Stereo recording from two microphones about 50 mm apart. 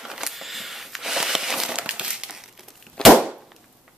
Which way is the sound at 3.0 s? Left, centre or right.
Centre.